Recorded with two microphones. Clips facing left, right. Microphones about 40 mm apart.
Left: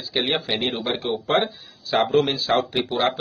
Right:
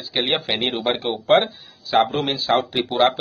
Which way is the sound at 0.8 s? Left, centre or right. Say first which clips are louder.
Right 4 dB; right.